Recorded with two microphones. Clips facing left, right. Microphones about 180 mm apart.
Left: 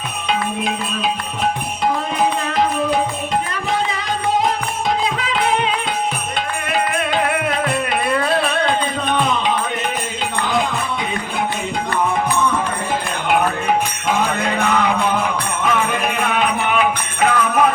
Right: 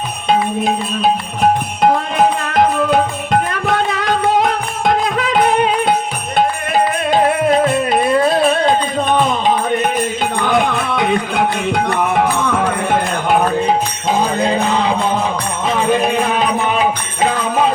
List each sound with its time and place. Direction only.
0.3 s music: 40° right (ahead or behind)
1.8 s music: 55° right (ahead or behind); by 9.1 s 40° right (ahead or behind)
10.4 s music: 60° right (ahead or behind)
13.7 s music: 30° right (ahead or behind)